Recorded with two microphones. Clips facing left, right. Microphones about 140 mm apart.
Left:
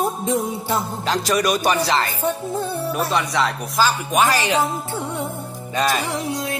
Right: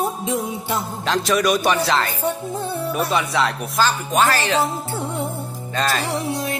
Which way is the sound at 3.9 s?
10° left (ahead or behind).